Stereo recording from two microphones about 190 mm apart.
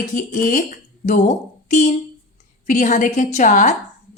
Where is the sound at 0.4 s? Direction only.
40° left (ahead or behind).